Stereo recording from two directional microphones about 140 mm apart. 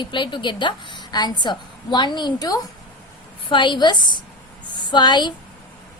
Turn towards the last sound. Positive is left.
turn(degrees=30)  # may be behind; listen again after turning